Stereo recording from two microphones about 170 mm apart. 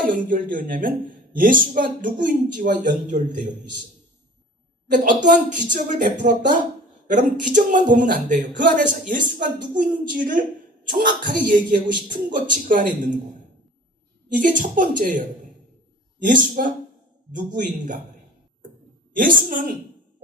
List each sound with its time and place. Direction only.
0.0 s speech: 55° right (ahead or behind)
4.9 s speech: 50° right (ahead or behind)
14.3 s speech: 50° right (ahead or behind)
19.1 s a woman's voice: 55° right (ahead or behind)